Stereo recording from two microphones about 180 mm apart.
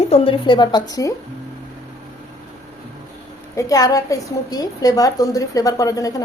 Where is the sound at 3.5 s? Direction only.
20° left (ahead or behind).